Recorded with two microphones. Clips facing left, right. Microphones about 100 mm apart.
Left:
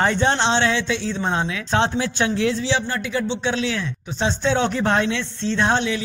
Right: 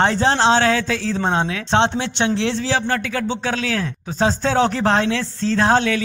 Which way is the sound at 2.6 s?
40° right (ahead or behind).